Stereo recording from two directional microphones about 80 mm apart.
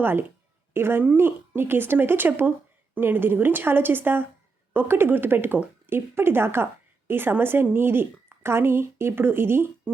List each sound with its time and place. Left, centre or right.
0.0 s a woman's voice: right